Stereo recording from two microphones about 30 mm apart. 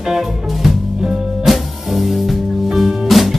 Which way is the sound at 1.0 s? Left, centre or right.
Right.